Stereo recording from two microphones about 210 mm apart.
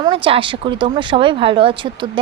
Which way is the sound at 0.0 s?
25° right (ahead or behind).